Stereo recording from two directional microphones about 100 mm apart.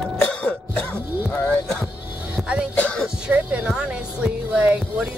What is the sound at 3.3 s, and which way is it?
Speech, 10° right (ahead or behind).